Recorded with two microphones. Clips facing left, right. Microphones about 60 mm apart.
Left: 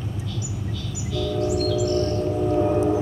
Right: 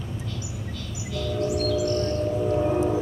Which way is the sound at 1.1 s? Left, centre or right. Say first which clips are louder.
Left 3 dB; right.